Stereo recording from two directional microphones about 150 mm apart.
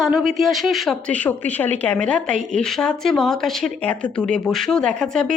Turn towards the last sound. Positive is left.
turn(degrees=5)  # may be behind; listen again after turning